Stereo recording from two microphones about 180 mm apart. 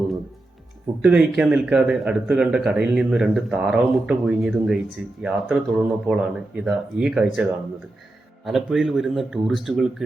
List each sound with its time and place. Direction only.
1.0 s speech: 5° right (ahead or behind)
8.4 s speech: centre (ahead or behind)